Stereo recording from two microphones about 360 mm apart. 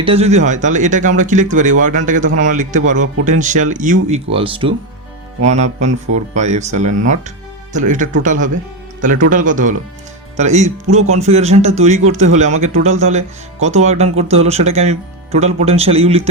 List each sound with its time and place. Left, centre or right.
0.0 s a man's voice: centre